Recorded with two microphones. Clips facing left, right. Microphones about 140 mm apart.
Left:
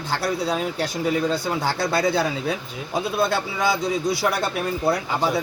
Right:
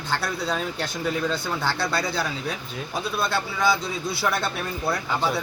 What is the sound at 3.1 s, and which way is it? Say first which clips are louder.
Speech: left 3 dB; 20° left (ahead or behind).